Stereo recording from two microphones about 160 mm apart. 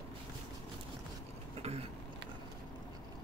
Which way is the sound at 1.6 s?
40° right (ahead or behind).